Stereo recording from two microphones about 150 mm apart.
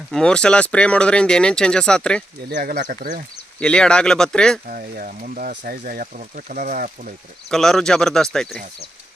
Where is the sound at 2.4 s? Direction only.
85° right.